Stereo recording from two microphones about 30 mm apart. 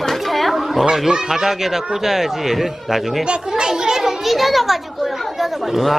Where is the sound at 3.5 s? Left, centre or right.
Right.